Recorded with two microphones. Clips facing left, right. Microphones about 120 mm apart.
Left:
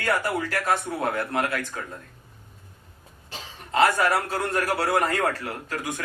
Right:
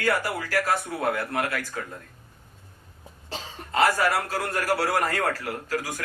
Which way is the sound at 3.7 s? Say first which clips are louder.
Left 1 dB; 25° left (ahead or behind).